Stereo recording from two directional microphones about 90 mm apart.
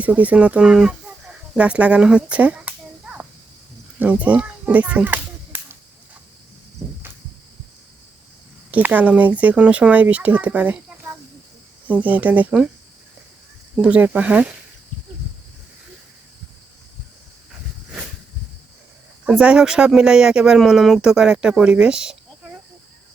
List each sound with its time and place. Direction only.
0.0 s speech: 15° right (ahead or behind)
4.0 s children playing: 15° right (ahead or behind)
6.8 s cricket: 20° right (ahead or behind)
8.7 s speech: 15° right (ahead or behind)
11.9 s speech: 15° right (ahead or behind)
13.8 s speech: 15° right (ahead or behind)
19.2 s speech: 10° right (ahead or behind)